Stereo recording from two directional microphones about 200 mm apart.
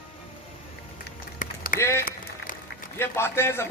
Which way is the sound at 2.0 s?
45° left (ahead or behind).